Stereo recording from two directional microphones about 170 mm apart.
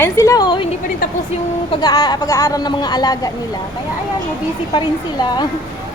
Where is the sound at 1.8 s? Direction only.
20° left (ahead or behind).